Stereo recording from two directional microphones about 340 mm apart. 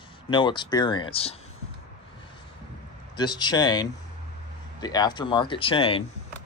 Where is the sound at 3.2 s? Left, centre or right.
Centre.